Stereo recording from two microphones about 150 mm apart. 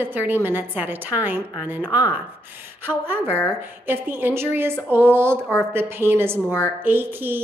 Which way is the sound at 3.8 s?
15° right (ahead or behind).